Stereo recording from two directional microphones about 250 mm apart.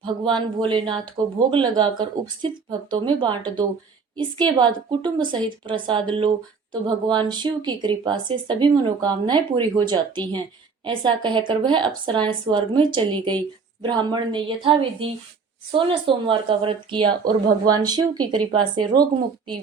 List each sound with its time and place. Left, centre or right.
0.0 s a woman's voice: centre